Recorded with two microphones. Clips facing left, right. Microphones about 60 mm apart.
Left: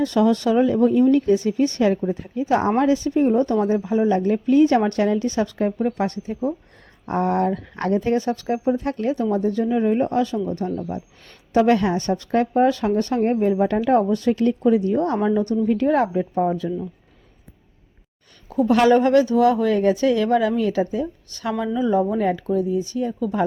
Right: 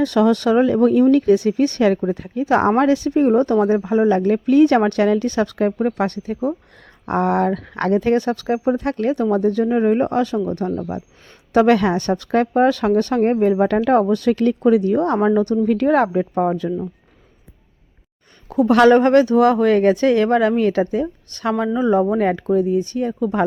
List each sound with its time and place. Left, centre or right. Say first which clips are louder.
0.0 s speech: right 3 dB; right
3.1 s speech: right 3 dB; right
8.8 s speech: right 3 dB; right
9.1 s speech: right 4 dB; right
11.5 s speech: right 3 dB; right
16.3 s speech: right 2 dB; right
18.4 s speech: right 4 dB; right